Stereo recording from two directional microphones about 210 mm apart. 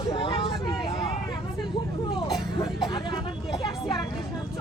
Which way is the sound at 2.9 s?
20° left (ahead or behind).